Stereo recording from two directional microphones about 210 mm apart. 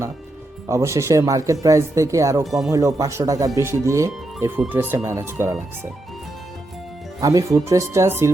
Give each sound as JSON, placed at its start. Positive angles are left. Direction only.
{"t": 0.7, "sound": "speech", "side_deg": -15}
{"t": 2.4, "sound": "speech", "side_deg": 0}
{"t": 2.6, "sound": "speech", "side_deg": -15}
{"t": 7.2, "sound": "speech", "side_deg": -15}